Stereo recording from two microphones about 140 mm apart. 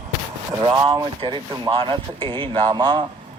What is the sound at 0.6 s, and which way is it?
Speech, 35° right (ahead or behind).